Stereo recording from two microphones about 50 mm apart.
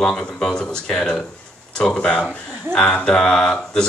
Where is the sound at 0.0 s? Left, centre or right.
Centre.